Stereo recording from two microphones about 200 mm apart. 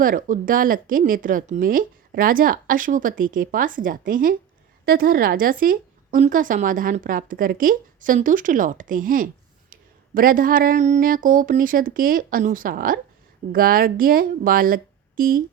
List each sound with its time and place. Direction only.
0.0 s a woman's voice: 45° right (ahead or behind)